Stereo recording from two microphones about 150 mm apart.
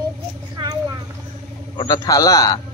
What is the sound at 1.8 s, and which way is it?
Speech, 25° left (ahead or behind).